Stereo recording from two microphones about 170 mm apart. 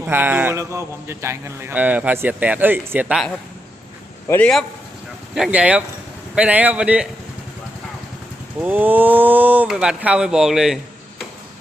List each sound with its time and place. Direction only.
0.1 s a man's voice: 10° right (ahead or behind)
4.3 s a man's voice: 5° left (ahead or behind)
5.3 s a man's voice: 5° right (ahead or behind)
8.6 s a man's voice: 10° right (ahead or behind)